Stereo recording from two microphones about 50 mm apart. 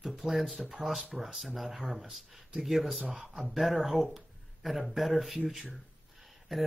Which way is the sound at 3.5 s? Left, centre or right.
Centre.